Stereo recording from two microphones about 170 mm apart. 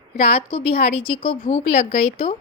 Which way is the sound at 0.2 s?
35° left (ahead or behind).